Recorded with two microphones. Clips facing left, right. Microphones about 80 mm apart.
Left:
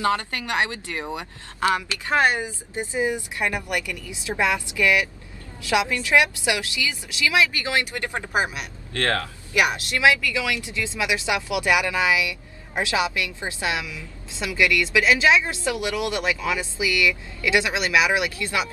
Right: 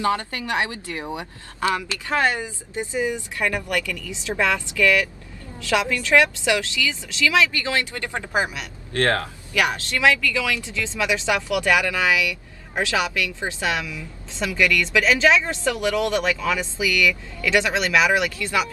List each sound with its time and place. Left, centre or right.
1.8 s speech: left
8.9 s speech: right
9.5 s speech: left